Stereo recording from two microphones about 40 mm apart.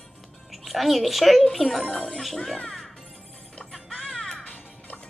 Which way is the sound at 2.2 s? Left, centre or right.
Centre.